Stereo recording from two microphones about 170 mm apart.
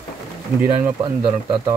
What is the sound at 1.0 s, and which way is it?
Speech, 25° right (ahead or behind).